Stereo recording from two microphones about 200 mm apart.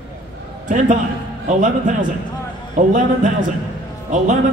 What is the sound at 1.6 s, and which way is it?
A man's voice, 40° right (ahead or behind).